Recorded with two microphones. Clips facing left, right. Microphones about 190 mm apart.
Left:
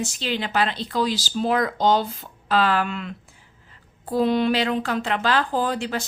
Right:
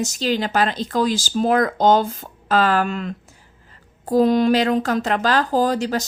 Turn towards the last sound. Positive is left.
turn(degrees=-40)  # may be behind; listen again after turning